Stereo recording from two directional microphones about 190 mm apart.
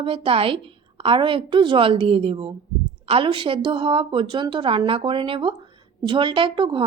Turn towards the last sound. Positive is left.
turn(degrees=-25)  # may be behind; listen again after turning